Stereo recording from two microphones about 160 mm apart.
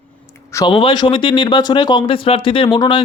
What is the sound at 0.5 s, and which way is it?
Speech, 30° left (ahead or behind).